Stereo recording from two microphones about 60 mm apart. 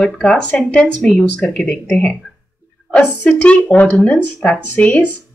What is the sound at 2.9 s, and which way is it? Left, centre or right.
Speech, left.